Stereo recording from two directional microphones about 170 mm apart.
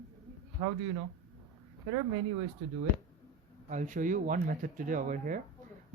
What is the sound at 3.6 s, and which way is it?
Speech, 50° right (ahead or behind).